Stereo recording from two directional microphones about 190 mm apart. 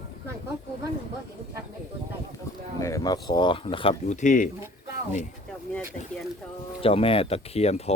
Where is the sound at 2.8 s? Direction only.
20° left (ahead or behind); by 4.5 s 40° left (ahead or behind).